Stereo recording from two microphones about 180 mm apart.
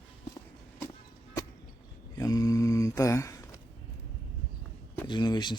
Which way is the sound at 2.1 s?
20° left (ahead or behind).